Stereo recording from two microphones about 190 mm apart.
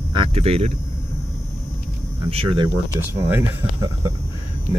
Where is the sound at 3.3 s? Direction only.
15° right (ahead or behind).